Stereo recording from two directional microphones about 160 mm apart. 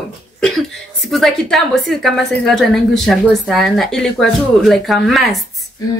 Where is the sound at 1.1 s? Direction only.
Centre (ahead or behind).